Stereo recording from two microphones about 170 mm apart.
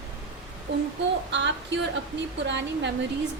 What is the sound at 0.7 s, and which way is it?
Speech, 90° right.